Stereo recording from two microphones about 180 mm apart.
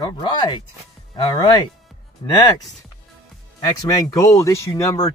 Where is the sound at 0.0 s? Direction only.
25° left (ahead or behind).